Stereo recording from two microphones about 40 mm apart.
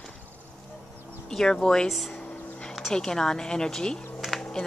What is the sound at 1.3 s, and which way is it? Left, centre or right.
Speech, centre.